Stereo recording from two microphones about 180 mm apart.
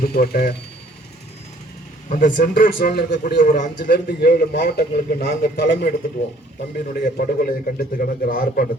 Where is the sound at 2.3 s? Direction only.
60° left (ahead or behind).